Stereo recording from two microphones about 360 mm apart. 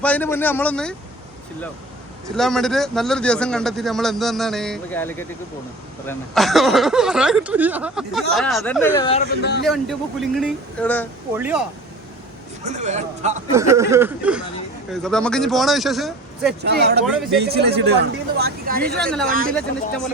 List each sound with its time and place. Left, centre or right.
0.0 s speech: centre
2.3 s speech: centre
9.4 s a man's voice: left
9.6 s speech: centre
12.6 s speech: centre
13.5 s speech: centre
16.6 s speech: right
18.9 s speech: centre
19.3 s speech: right